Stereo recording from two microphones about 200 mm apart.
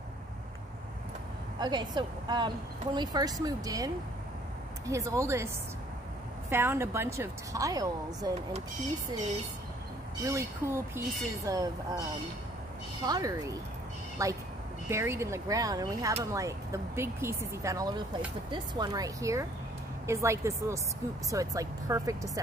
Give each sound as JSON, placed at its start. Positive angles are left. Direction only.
{"t": 1.6, "sound": "a woman's voice", "side_deg": -20}
{"t": 6.5, "sound": "a woman's voice", "side_deg": -10}
{"t": 10.2, "sound": "a woman's voice", "side_deg": -15}
{"t": 13.0, "sound": "a woman's voice", "side_deg": -20}